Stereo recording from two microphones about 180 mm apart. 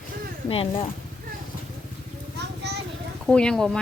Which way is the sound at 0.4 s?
30° left (ahead or behind).